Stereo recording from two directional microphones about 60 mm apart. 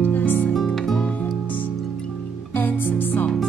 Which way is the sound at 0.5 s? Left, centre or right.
Centre.